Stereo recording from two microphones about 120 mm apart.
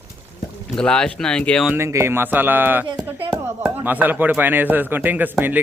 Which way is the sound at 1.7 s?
20° right (ahead or behind).